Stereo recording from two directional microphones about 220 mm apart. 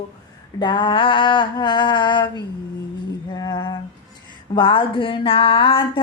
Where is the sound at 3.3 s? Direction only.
20° left (ahead or behind).